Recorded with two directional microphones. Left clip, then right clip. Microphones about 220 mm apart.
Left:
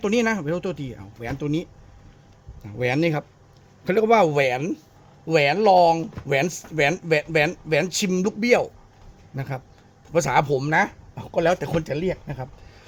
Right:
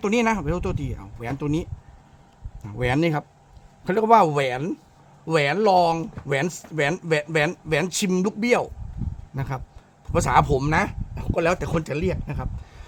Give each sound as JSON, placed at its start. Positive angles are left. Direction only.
{"t": 0.0, "sound": "speech", "side_deg": -15}
{"t": 2.6, "sound": "speech", "side_deg": -15}